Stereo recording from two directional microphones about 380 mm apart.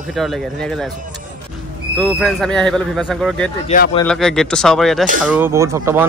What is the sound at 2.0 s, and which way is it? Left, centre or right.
Speech, centre.